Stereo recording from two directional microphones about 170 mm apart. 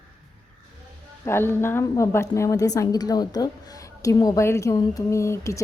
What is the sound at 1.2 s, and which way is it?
Speech, 15° left (ahead or behind).